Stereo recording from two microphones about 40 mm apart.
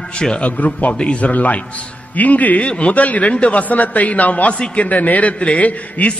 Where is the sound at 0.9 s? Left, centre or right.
Left.